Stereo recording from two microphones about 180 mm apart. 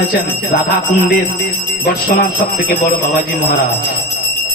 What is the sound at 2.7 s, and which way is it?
Speech, 50° left (ahead or behind).